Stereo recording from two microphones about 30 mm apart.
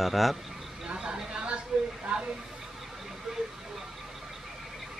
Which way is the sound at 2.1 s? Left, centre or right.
Right.